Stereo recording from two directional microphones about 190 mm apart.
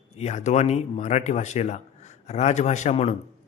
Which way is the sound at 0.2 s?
35° left (ahead or behind).